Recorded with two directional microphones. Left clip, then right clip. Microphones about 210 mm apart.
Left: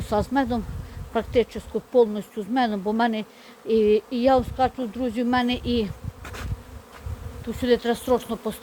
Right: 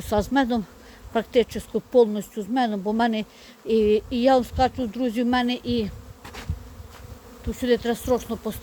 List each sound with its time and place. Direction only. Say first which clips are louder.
0.0 s speech: right 1 dB; 15° right (ahead or behind)
2.5 s speech: left 1 dB; 10° right (ahead or behind)
7.4 s speech: left 1 dB; 10° right (ahead or behind)